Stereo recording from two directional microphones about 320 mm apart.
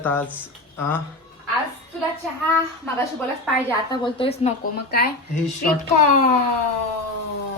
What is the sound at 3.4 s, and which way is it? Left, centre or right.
A man's voice, centre.